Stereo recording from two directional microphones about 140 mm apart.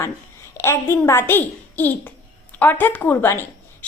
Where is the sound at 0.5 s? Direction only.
20° left (ahead or behind).